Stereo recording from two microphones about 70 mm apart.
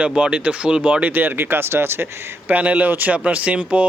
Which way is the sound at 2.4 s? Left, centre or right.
Right.